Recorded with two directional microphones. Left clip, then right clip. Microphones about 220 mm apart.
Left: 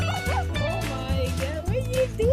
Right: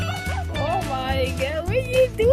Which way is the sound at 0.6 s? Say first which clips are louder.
Right 5 dB; centre (ahead or behind).